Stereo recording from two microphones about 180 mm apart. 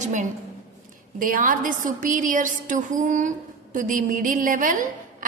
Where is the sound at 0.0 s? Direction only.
45° right (ahead or behind).